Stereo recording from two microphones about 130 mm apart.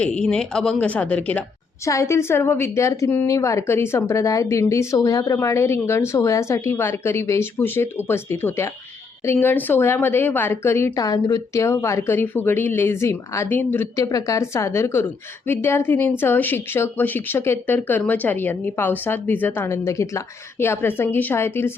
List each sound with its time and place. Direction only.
0.0 s a woman's voice: 5° left (ahead or behind)
1.8 s a woman's voice: 20° left (ahead or behind)